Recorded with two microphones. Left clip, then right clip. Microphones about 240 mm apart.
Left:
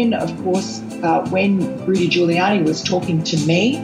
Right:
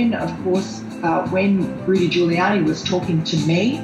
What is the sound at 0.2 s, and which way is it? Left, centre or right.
Speech, left.